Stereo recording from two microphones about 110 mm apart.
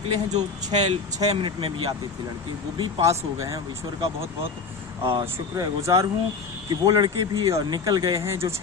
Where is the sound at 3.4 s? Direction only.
30° right (ahead or behind).